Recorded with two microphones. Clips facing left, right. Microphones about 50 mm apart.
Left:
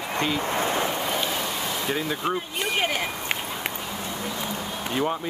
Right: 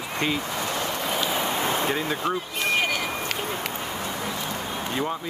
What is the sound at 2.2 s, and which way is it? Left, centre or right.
Speech, centre.